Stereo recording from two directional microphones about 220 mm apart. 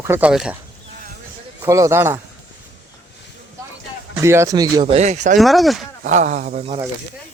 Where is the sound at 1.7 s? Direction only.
15° right (ahead or behind).